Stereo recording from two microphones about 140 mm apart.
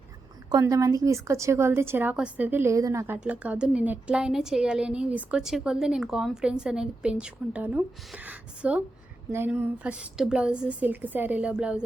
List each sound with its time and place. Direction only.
0.6 s a woman's voice: 25° right (ahead or behind); by 11.8 s 10° right (ahead or behind)